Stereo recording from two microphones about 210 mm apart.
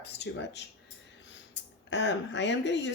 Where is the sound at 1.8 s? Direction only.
55° left (ahead or behind).